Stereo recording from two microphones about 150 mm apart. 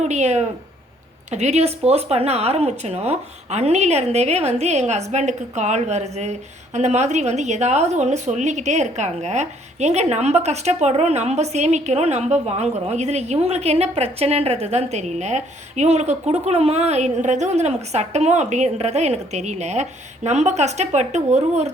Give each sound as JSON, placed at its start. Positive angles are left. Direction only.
{"t": 0.0, "sound": "a woman's voice", "side_deg": -50}